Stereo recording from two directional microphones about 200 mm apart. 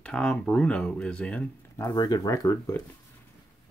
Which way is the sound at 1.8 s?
20° left (ahead or behind).